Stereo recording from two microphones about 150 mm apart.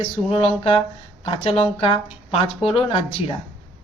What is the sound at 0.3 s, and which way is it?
A man's voice, 35° left (ahead or behind).